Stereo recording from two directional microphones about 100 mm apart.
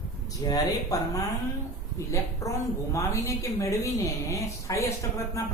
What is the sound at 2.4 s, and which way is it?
Speech, 30° left (ahead or behind).